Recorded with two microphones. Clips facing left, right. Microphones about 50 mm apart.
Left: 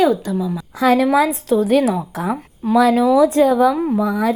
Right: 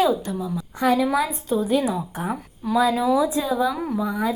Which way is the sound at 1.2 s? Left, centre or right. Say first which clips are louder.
Left 7 dB; left.